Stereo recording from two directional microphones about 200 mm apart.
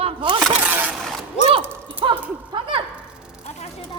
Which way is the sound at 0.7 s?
10° right (ahead or behind).